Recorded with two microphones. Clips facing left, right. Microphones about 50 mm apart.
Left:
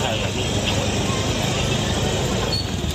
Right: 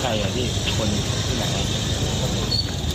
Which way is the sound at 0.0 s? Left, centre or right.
Left.